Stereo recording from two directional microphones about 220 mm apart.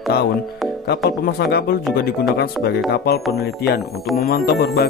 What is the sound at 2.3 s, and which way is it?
Speech, 45° left (ahead or behind).